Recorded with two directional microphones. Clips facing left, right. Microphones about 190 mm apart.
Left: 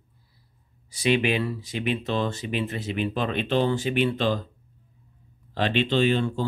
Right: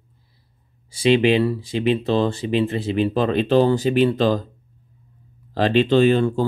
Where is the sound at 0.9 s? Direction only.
30° right (ahead or behind).